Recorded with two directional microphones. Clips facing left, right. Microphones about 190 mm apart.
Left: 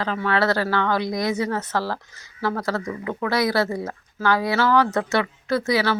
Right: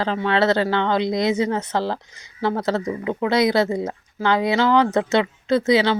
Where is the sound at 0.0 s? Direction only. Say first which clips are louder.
Right 3 dB; 25° right (ahead or behind).